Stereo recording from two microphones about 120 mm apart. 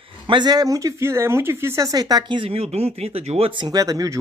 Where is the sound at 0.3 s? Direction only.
35° right (ahead or behind).